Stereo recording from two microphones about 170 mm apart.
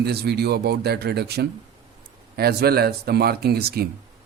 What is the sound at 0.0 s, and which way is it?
A man's voice, 70° right (ahead or behind).